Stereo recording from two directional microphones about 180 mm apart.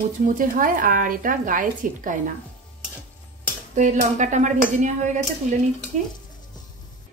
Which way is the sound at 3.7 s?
45° right (ahead or behind).